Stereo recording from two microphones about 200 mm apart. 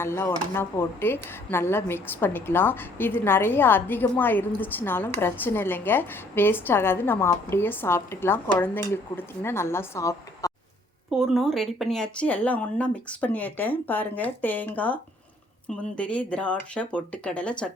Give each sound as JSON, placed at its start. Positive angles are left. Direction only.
{"t": 0.0, "sound": "a woman's voice", "side_deg": 10}
{"t": 11.1, "sound": "a woman's voice", "side_deg": 0}